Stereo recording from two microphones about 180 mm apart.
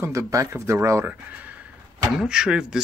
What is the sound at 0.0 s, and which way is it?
Speech, 15° right (ahead or behind).